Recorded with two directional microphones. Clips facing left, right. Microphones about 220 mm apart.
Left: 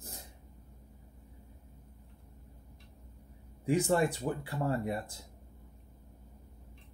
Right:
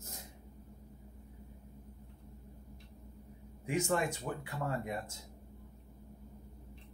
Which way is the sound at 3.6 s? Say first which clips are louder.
Left 5 dB; 35° left (ahead or behind).